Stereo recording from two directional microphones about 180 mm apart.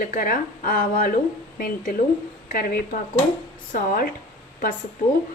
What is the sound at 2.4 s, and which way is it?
Speech, 55° left (ahead or behind).